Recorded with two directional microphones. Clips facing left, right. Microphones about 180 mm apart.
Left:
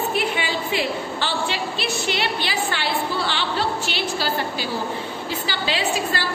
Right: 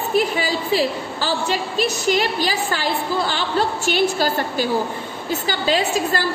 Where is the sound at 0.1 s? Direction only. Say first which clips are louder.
Right 4 dB; 40° right (ahead or behind).